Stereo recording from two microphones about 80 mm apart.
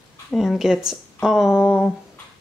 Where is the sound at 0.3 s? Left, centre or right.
Centre.